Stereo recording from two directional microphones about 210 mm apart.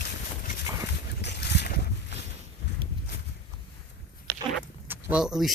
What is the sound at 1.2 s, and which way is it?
Boat, 55° left (ahead or behind).